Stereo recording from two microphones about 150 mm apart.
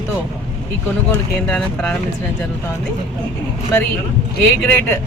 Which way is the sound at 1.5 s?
5° left (ahead or behind).